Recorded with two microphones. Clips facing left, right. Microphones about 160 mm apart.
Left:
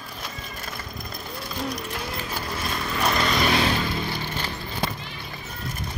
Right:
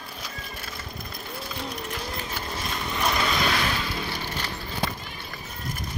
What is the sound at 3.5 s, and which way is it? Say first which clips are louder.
Vehicle: left 4 dB; 30° left (ahead or behind).